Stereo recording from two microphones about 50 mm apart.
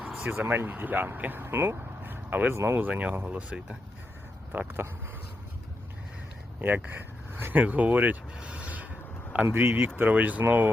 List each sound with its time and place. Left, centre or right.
0.3 s speech: right
0.7 s speech: right
2.6 s speech: right
2.8 s speech: right
4.5 s speech: right
6.6 s speech: right
8.4 s mechanisms: right
9.5 s speech: right
10.2 s speech: right